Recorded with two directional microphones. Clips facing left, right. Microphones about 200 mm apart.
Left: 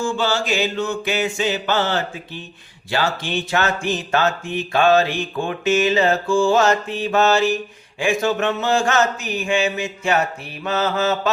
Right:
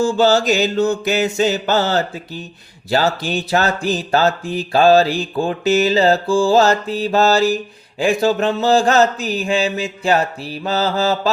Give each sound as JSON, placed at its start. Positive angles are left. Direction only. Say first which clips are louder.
{"t": 0.0, "sound": "speech", "louder": "right 7 dB", "side_deg": -40}